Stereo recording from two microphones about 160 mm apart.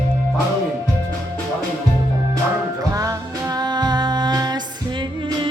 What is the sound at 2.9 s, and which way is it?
Music, 20° right (ahead or behind).